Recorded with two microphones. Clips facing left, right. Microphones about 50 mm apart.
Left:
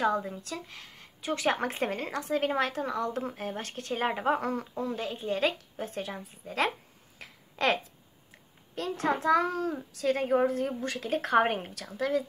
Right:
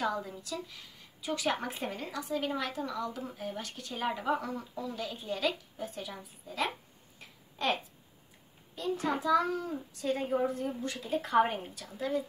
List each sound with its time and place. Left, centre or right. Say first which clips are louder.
0.0 s speech: left 5 dB; left
7.2 s a sound: left 6 dB; left
8.7 s a child's voice: left 3 dB; left